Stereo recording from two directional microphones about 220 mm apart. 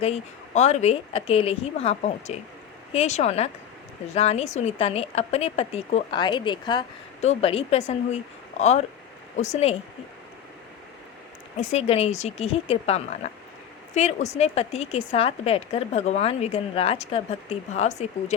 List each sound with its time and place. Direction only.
0.0 s speech: 30° left (ahead or behind)
11.7 s speech: 30° left (ahead or behind)